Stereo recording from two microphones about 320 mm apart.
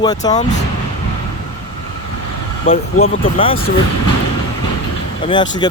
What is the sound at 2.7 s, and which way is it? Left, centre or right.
Speech, centre.